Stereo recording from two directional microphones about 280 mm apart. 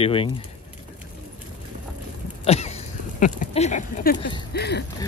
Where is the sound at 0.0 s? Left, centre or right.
Centre.